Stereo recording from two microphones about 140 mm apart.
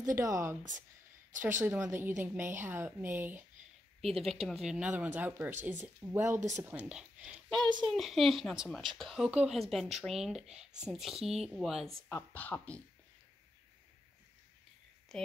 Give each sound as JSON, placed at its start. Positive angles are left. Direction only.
{"t": 0.1, "sound": "speech", "side_deg": -25}
{"t": 1.6, "sound": "a woman's voice", "side_deg": -20}
{"t": 4.0, "sound": "a woman's voice", "side_deg": 0}
{"t": 7.4, "sound": "a child's voice", "side_deg": 5}
{"t": 12.1, "sound": "speech", "side_deg": 10}